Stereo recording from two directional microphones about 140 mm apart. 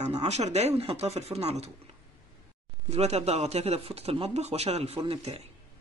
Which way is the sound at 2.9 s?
50° right (ahead or behind).